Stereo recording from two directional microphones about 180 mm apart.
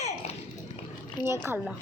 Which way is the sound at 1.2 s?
15° right (ahead or behind).